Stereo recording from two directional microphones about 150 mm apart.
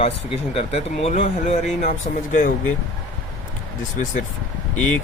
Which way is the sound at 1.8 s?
60° left (ahead or behind).